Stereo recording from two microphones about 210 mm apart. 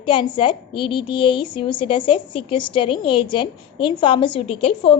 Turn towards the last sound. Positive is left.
turn(degrees=25)  # may be behind; listen again after turning